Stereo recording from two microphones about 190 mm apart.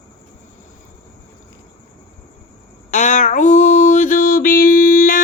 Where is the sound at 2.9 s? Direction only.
40° left (ahead or behind).